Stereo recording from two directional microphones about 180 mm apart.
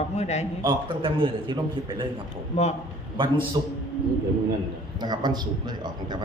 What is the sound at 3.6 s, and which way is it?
Speech, 25° right (ahead or behind).